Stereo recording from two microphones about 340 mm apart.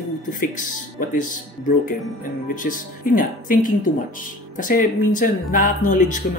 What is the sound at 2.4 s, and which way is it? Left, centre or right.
Speech, left.